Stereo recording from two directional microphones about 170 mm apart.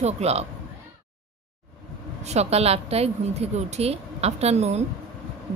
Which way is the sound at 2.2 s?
40° right (ahead or behind).